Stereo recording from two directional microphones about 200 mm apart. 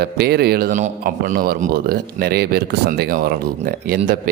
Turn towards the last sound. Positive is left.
turn(degrees=-45)  # may be behind; listen again after turning